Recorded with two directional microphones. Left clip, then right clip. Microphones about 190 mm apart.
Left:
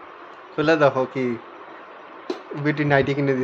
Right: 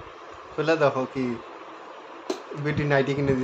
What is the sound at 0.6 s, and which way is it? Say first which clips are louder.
Speech: left 4 dB; 15° left (ahead or behind).